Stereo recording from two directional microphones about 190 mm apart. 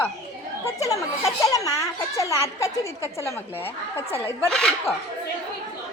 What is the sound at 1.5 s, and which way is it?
A woman's voice, 20° left (ahead or behind).